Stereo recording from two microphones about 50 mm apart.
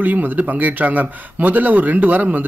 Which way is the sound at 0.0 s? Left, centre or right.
Right.